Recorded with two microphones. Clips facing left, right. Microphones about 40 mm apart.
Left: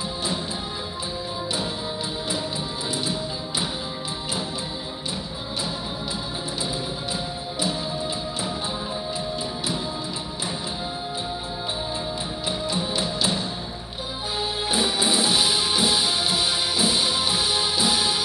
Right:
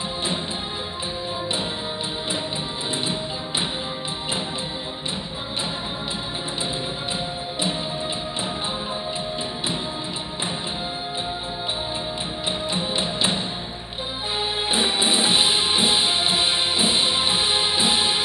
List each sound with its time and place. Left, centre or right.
12.4 s music: right
14.4 s music: right